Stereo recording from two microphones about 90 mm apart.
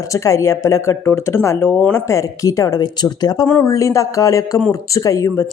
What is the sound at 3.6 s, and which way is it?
Speech, 35° left (ahead or behind).